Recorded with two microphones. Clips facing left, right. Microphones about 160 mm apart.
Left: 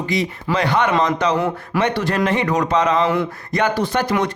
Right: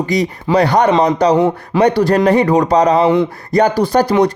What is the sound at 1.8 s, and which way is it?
Speech, 35° right (ahead or behind).